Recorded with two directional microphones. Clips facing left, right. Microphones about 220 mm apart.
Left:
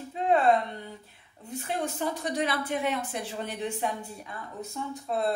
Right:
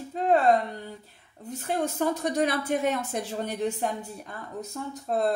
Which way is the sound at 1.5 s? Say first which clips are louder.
Right 3 dB; 45° right (ahead or behind).